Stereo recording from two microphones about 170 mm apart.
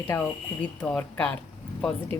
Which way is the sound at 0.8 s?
5° left (ahead or behind).